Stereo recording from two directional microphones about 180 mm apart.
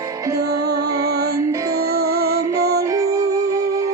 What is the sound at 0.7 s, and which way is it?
Music, 60° right (ahead or behind).